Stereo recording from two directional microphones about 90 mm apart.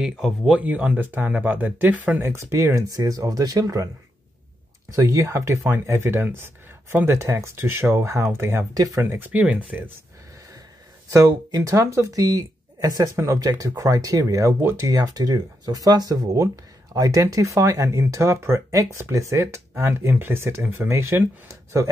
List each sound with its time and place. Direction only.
0.0 s speech: 5° right (ahead or behind)
0.6 s speech: 15° right (ahead or behind)
2.1 s speech: 30° right (ahead or behind)
4.9 s speech: 40° right (ahead or behind)
8.7 s speech: 40° right (ahead or behind)
9.0 s speech: 25° right (ahead or behind)
11.1 s speech: 40° right (ahead or behind)
13.1 s speech: 35° right (ahead or behind); by 20.9 s 20° right (ahead or behind)
20.9 s speech: 30° right (ahead or behind)